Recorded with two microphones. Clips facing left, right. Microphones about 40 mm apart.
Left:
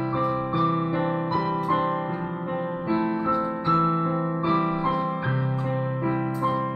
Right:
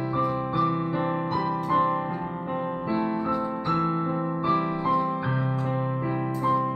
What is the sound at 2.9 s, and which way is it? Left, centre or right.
Music, centre.